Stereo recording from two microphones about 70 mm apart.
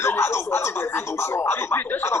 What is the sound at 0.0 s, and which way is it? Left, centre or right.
Speech, left.